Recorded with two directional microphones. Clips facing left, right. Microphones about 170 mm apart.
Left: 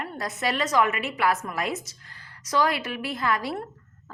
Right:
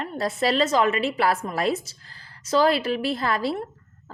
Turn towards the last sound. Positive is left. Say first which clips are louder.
# right 2 dB
turn(degrees=-30)  # may be behind; listen again after turning